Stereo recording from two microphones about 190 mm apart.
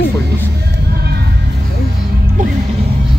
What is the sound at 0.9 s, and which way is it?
Music, 55° right (ahead or behind).